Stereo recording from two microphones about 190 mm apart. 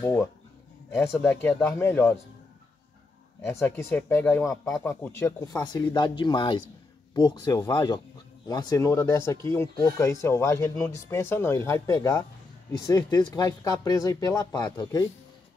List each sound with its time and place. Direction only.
0.0 s speech: 15° left (ahead or behind)
3.4 s speech: 10° left (ahead or behind)